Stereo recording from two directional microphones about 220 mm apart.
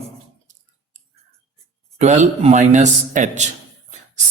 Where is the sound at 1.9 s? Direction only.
30° right (ahead or behind).